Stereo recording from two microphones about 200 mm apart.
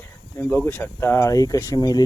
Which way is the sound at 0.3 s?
10° left (ahead or behind).